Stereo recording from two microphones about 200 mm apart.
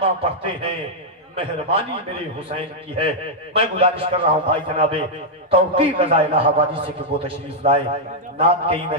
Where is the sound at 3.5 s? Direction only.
30° right (ahead or behind).